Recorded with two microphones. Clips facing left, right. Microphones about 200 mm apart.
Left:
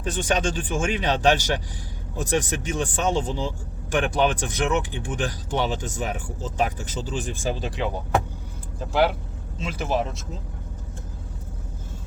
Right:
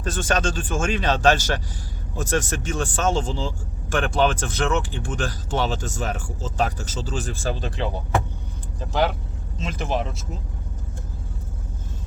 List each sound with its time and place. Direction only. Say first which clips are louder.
0.1 s speech: even; 15° left (ahead or behind)
9.6 s speech: right 1 dB; 10° left (ahead or behind)